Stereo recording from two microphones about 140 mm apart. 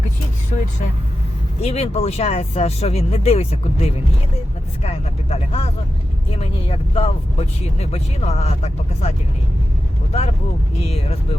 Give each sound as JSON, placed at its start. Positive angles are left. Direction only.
{"t": 0.5, "sound": "speech", "side_deg": 50}